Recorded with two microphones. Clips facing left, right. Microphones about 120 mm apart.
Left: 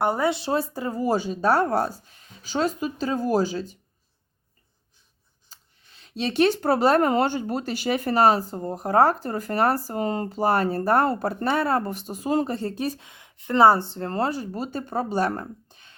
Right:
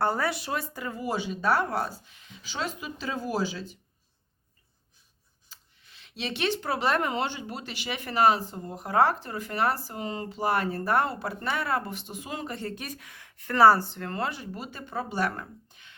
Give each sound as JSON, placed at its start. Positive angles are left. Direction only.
{"t": 0.0, "sound": "speech", "side_deg": 20}
{"t": 5.5, "sound": "speech", "side_deg": 40}